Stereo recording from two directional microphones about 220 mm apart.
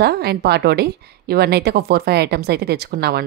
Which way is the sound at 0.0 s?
45° right (ahead or behind).